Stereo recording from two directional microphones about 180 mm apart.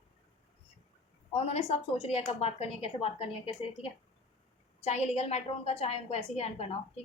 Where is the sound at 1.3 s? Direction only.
35° left (ahead or behind).